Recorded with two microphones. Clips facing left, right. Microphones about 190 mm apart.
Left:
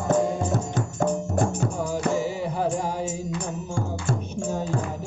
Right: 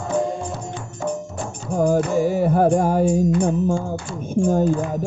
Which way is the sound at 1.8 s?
55° right (ahead or behind).